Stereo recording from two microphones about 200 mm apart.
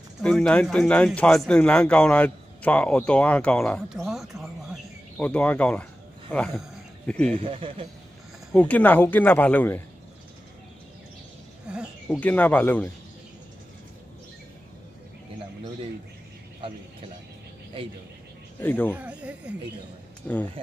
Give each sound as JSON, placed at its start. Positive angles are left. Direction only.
{"t": 0.2, "sound": "speech", "side_deg": 5}
{"t": 7.2, "sound": "a man's voice", "side_deg": -30}
{"t": 8.5, "sound": "speech", "side_deg": 5}
{"t": 11.6, "sound": "a sound", "side_deg": -5}
{"t": 12.2, "sound": "speech", "side_deg": 10}
{"t": 18.6, "sound": "speech", "side_deg": 10}
{"t": 18.9, "sound": "speech", "side_deg": -5}
{"t": 20.2, "sound": "speech", "side_deg": 10}